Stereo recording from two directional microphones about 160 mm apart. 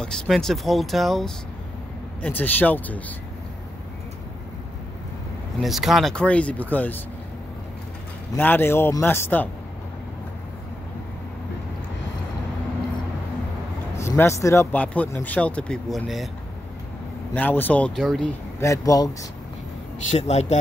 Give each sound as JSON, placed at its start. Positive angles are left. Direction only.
{"t": 0.0, "sound": "speech", "side_deg": 5}
{"t": 5.6, "sound": "speech", "side_deg": 0}
{"t": 8.4, "sound": "speech", "side_deg": 10}
{"t": 13.9, "sound": "speech", "side_deg": 15}
{"t": 17.3, "sound": "speech", "side_deg": 10}
{"t": 18.6, "sound": "speech", "side_deg": 20}
{"t": 20.1, "sound": "speech", "side_deg": 40}